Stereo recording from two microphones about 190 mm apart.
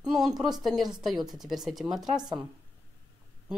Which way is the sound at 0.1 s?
Centre (ahead or behind).